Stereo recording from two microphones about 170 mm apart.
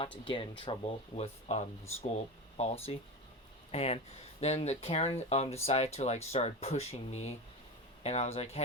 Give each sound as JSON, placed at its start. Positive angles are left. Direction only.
{"t": 0.6, "sound": "speech", "side_deg": 30}